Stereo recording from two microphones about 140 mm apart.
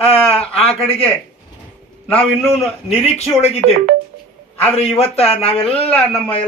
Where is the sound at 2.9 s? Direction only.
50° left (ahead or behind).